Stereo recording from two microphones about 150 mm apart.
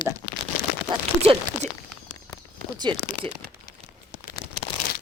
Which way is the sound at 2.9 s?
30° right (ahead or behind).